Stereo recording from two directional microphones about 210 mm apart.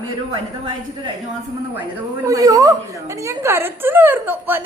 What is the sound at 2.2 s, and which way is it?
A woman's voice, 15° right (ahead or behind).